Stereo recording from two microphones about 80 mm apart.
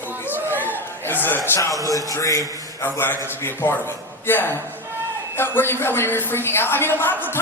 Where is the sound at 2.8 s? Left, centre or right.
Left.